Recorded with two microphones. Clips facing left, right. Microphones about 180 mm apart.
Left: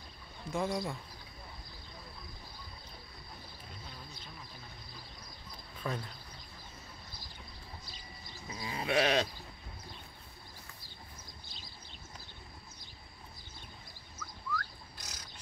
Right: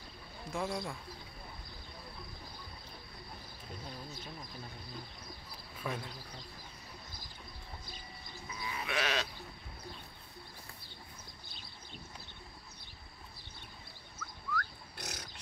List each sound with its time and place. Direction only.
0.5 s speech: centre (ahead or behind)
5.9 s speech: 10° right (ahead or behind)
8.5 s sheep: 30° left (ahead or behind)
14.1 s a sound: 60° right (ahead or behind)